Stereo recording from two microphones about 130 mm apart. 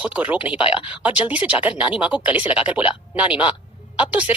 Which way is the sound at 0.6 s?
40° left (ahead or behind).